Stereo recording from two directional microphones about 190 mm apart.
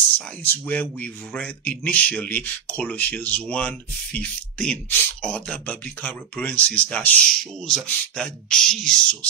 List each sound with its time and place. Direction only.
0.4 s speech: 10° left (ahead or behind)